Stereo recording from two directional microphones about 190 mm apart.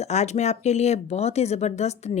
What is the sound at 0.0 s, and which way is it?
Speech, 35° left (ahead or behind).